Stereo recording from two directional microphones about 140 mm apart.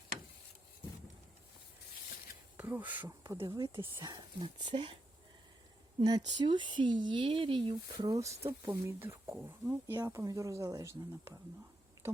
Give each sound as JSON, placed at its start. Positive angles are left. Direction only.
{"t": 2.6, "sound": "speech", "side_deg": -10}
{"t": 3.3, "sound": "speech", "side_deg": -30}
{"t": 6.1, "sound": "speech", "side_deg": -30}
{"t": 8.0, "sound": "speech", "side_deg": -25}